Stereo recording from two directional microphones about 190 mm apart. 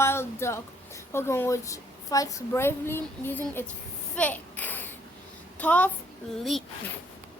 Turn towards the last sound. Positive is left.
turn(degrees=0)  # may be behind; listen again after turning